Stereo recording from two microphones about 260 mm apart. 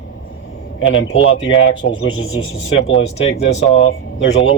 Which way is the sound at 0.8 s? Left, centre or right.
Left.